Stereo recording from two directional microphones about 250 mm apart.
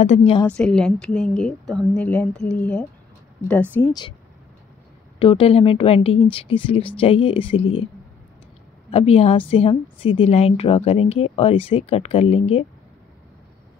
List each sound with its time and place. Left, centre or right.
0.0 s a woman's voice: left
0.6 s a woman's voice: centre
5.2 s a woman's voice: left
8.9 s a woman's voice: left